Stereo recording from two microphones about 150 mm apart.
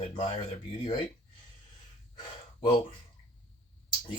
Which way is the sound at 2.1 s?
30° left (ahead or behind).